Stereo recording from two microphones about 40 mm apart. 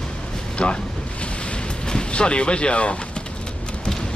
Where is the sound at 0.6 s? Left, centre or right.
Left.